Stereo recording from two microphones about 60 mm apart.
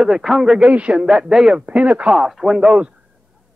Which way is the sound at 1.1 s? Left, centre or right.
Centre.